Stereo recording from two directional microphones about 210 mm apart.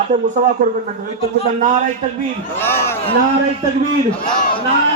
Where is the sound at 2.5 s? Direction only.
10° left (ahead or behind).